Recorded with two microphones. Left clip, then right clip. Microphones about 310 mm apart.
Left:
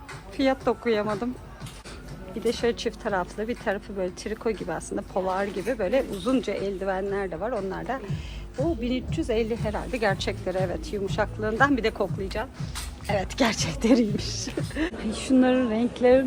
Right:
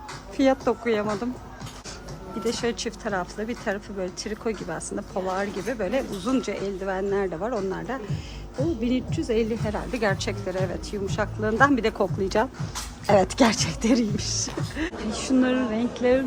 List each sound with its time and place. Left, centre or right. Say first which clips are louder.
0.3 s speech: right 2 dB; centre
2.4 s speech: left 2 dB; centre